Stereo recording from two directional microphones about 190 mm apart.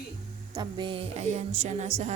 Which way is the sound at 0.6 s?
25° right (ahead or behind).